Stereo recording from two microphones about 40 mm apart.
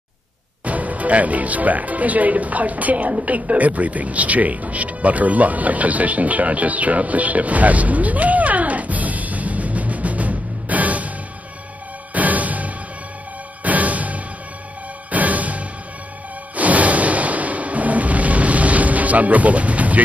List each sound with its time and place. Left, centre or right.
0.7 s speech: right
12.1 s music: right